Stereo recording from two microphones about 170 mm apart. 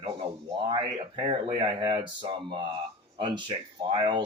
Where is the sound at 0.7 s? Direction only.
30° right (ahead or behind).